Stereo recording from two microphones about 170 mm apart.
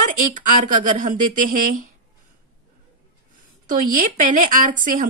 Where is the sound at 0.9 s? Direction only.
50° right (ahead or behind).